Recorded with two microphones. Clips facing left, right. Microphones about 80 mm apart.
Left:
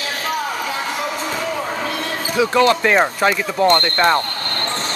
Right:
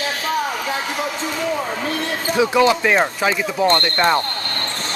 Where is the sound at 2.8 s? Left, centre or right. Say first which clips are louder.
Left 2 dB; centre.